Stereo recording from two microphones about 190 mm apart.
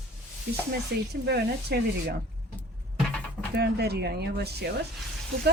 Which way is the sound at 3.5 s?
60° right (ahead or behind).